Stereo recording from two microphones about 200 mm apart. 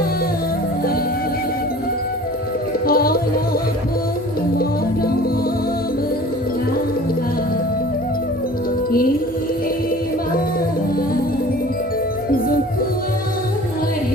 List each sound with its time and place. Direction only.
2.8 s music: 50° left (ahead or behind)